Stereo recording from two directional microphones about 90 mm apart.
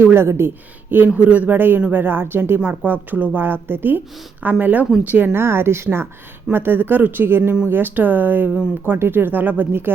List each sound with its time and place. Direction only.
0.0 s speech: 25° right (ahead or behind)